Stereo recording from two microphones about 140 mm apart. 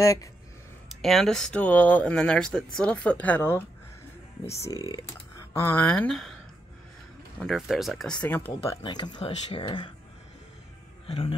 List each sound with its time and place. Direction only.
0.0 s speech: 25° left (ahead or behind)
0.8 s speech: centre (ahead or behind)
7.3 s speech: centre (ahead or behind)
8.8 s speech: 30° left (ahead or behind)
11.1 s a man's voice: 40° left (ahead or behind)